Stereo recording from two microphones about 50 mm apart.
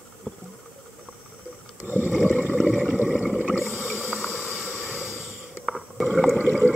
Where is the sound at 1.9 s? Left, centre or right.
Left.